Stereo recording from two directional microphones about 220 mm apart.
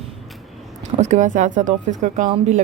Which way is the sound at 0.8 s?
30° right (ahead or behind).